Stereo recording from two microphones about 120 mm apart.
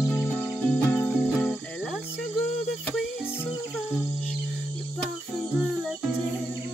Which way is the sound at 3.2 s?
20° left (ahead or behind).